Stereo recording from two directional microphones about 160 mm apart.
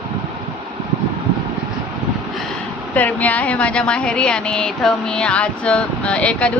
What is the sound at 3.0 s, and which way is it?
Speech, 10° left (ahead or behind).